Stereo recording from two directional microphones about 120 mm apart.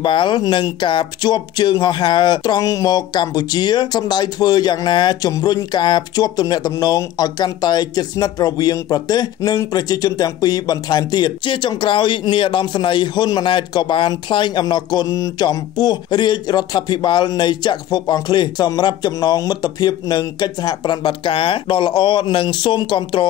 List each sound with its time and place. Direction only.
0.0 s speech: 40° left (ahead or behind)